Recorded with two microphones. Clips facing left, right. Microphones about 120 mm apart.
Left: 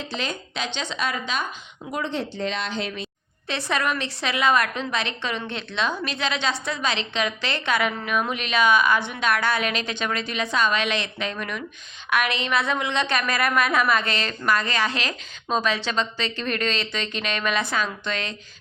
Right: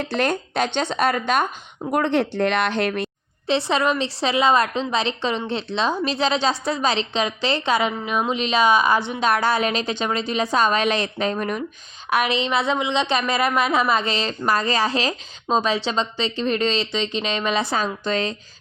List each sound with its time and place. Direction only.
0.0 s speech: 60° right (ahead or behind)
3.4 s a woman's voice: 30° right (ahead or behind)